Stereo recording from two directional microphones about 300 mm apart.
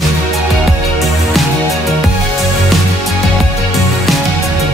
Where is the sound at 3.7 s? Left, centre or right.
Centre.